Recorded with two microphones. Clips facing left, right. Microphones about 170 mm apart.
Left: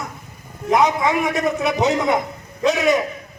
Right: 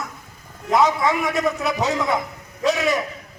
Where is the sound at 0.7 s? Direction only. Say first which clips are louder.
Left 1 dB; 15° left (ahead or behind).